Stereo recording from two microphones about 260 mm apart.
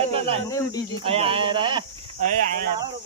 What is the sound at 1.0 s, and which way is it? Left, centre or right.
Speech, right.